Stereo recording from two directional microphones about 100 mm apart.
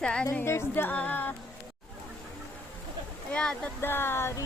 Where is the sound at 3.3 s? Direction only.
10° left (ahead or behind).